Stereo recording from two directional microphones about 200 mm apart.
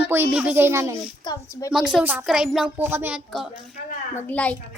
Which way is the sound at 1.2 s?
20° left (ahead or behind).